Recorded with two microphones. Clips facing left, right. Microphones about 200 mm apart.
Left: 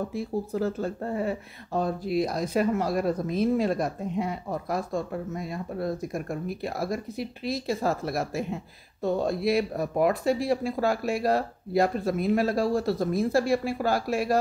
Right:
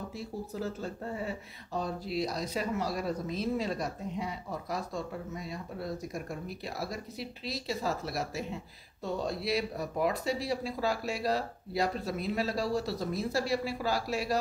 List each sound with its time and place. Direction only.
0.1 s speech: 55° left (ahead or behind)